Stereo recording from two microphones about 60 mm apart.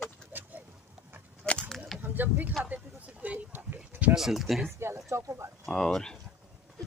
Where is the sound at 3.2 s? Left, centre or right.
Right.